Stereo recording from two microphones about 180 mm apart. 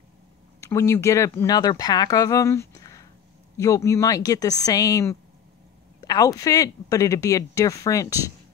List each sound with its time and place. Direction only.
0.6 s speech: 15° left (ahead or behind)